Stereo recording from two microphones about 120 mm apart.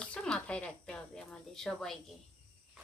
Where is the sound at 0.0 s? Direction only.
10° left (ahead or behind).